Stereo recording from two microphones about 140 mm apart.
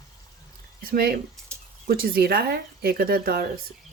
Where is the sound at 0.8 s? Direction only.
90° right.